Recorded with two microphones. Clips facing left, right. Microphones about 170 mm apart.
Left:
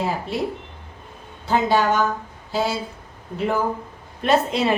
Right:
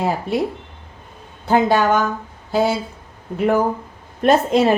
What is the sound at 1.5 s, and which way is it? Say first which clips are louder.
Speech: right 4 dB; 55° right (ahead or behind).